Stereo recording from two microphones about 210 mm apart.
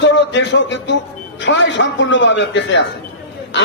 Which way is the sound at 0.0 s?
60° left (ahead or behind).